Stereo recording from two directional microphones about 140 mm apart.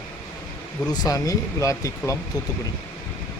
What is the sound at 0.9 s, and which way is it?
Speech, 25° left (ahead or behind).